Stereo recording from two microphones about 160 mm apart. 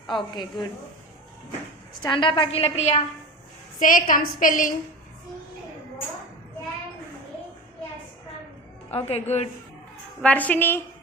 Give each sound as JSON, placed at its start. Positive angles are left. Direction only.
{"t": 0.1, "sound": "a woman's voice", "side_deg": 30}
{"t": 2.0, "sound": "a woman's voice", "side_deg": 30}
{"t": 3.8, "sound": "a woman's voice", "side_deg": 55}
{"t": 8.9, "sound": "a woman's voice", "side_deg": 40}
{"t": 10.2, "sound": "a woman's voice", "side_deg": 10}